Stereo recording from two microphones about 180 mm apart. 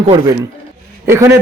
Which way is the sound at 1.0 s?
15° right (ahead or behind).